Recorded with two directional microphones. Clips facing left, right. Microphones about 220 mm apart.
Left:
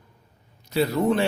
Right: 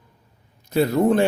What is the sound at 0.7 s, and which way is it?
Speech, 50° right (ahead or behind).